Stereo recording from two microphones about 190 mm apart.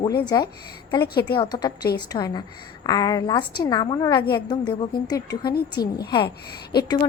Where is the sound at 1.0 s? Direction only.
55° left (ahead or behind).